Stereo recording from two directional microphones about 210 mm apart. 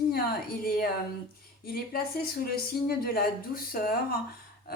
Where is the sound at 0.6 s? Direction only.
45° left (ahead or behind).